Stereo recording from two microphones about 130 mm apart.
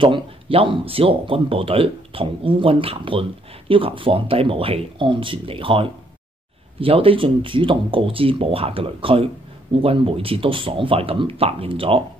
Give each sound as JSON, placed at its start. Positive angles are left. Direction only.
{"t": 0.0, "sound": "speech", "side_deg": -45}